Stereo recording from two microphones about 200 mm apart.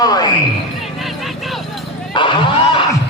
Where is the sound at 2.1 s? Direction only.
25° left (ahead or behind).